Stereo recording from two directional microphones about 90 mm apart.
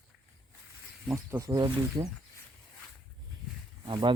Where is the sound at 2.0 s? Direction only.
50° right (ahead or behind).